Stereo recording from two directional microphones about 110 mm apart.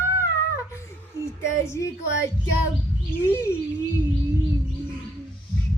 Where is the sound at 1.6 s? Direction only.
25° left (ahead or behind).